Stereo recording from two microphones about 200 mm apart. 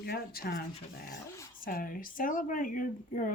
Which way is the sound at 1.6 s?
45° left (ahead or behind).